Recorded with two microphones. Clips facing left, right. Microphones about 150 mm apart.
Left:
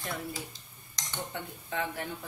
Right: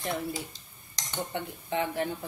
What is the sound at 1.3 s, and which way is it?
Speech, 25° right (ahead or behind).